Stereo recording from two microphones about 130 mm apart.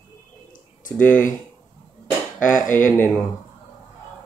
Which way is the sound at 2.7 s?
15° left (ahead or behind).